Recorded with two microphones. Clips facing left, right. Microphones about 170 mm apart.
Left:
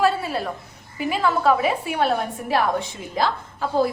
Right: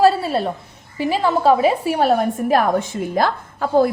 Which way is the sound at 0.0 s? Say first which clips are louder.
Right 6 dB; 35° right (ahead or behind).